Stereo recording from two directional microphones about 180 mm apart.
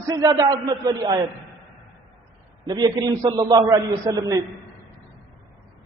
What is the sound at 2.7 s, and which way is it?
A man's voice, 25° right (ahead or behind).